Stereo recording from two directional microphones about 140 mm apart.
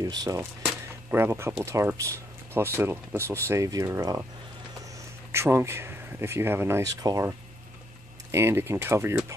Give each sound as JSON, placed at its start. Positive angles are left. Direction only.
{"t": 0.0, "sound": "speech", "side_deg": -25}
{"t": 5.3, "sound": "speech", "side_deg": -20}